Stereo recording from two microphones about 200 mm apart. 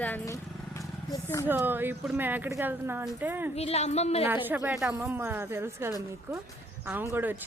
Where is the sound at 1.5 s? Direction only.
10° right (ahead or behind).